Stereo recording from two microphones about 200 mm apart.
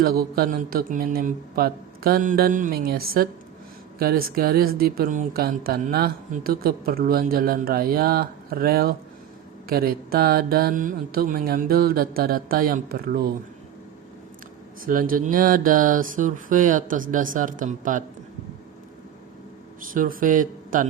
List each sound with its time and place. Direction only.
0.0 s speech: 50° right (ahead or behind)
14.8 s speech: 45° right (ahead or behind)
19.9 s speech: 45° right (ahead or behind)